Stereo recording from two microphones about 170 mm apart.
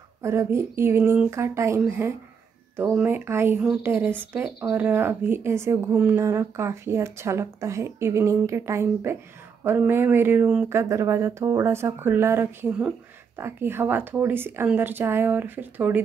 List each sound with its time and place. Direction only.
0.2 s speech: 15° right (ahead or behind)